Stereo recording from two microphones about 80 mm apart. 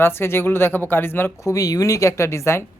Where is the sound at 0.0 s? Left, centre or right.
Left.